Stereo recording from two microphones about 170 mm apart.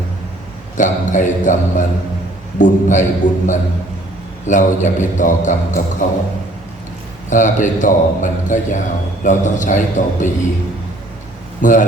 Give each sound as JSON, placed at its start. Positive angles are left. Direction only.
{"t": 0.8, "sound": "a man's voice", "side_deg": 50}
{"t": 7.3, "sound": "a man's voice", "side_deg": 50}
{"t": 11.6, "sound": "a man's voice", "side_deg": 50}